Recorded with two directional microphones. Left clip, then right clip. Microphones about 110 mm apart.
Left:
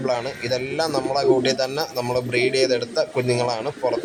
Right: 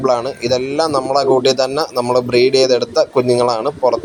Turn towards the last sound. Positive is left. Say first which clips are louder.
# right 8 dB
turn(degrees=-40)  # may be behind; listen again after turning